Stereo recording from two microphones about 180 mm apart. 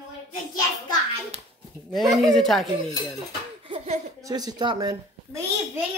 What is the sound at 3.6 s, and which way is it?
Laughter, 35° right (ahead or behind).